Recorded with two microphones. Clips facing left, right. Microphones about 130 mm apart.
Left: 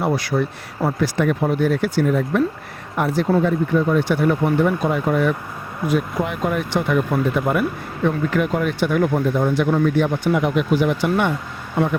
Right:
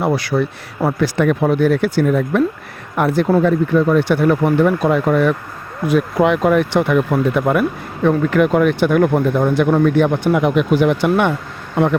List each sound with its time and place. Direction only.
0.0 s speech: 80° right
5.9 s speech: 85° right; by 11.3 s 65° right (ahead or behind)